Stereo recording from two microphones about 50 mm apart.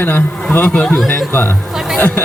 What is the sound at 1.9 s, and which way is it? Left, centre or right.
Speech, left.